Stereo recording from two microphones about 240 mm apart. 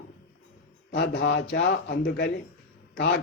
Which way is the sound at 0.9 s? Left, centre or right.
Left.